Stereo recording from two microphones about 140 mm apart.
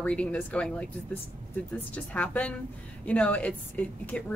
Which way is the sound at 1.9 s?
10° left (ahead or behind).